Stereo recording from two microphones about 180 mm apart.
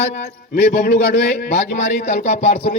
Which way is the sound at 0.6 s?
55° left (ahead or behind).